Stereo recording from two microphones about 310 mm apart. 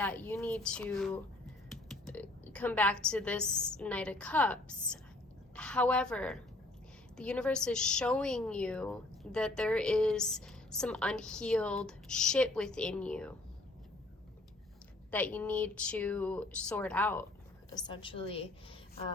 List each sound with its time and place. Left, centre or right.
0.0 s a woman's voice: centre
15.1 s a woman's voice: centre